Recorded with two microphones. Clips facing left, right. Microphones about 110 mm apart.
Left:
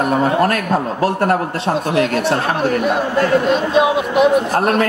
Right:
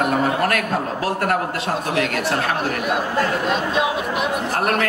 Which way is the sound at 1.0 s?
30° left (ahead or behind).